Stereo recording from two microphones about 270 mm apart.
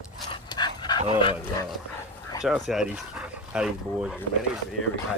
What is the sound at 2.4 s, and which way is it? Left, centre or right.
Speech, centre.